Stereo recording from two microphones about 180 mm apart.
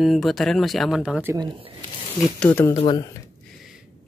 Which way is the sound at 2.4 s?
10° left (ahead or behind).